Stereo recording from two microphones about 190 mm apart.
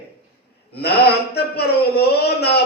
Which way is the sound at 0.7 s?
60° left (ahead or behind).